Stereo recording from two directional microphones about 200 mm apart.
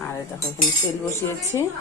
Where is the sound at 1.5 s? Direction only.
15° left (ahead or behind).